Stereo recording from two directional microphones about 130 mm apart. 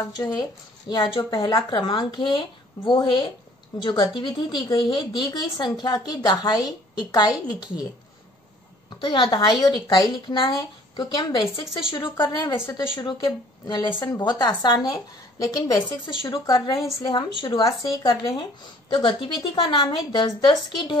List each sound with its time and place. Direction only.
0.1 s speech: 30° left (ahead or behind)
9.0 s speech: 40° left (ahead or behind)
17.6 s speech: centre (ahead or behind)
18.0 s speech: 40° left (ahead or behind)